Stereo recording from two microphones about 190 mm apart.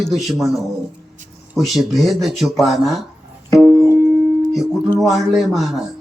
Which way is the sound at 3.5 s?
15° left (ahead or behind).